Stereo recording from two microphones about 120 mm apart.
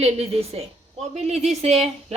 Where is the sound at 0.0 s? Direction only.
60° right (ahead or behind).